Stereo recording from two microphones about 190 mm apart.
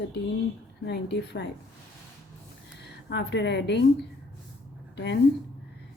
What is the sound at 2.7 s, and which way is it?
A woman's voice, 60° left (ahead or behind).